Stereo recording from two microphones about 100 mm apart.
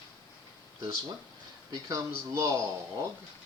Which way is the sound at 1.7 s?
35° right (ahead or behind).